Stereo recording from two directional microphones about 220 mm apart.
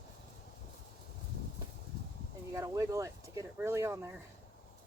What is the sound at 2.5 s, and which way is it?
Speech, 15° right (ahead or behind).